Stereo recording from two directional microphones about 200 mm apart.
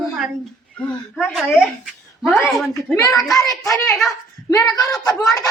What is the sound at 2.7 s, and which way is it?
Speech, 15° left (ahead or behind).